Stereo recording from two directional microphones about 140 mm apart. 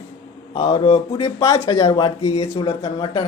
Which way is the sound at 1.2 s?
25° left (ahead or behind).